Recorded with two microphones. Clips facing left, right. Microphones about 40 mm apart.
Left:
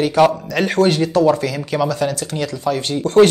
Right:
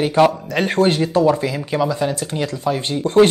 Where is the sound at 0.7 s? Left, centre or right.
Right.